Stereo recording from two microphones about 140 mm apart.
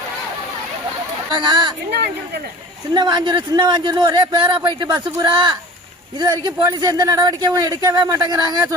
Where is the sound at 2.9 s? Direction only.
30° right (ahead or behind).